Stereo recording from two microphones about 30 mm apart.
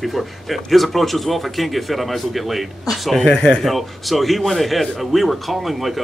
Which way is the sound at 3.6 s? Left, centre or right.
Centre.